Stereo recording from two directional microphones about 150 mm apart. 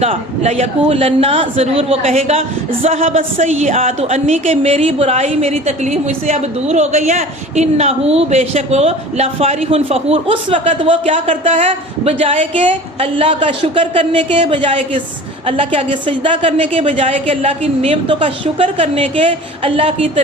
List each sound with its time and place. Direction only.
0.0 s a woman's voice: 40° right (ahead or behind)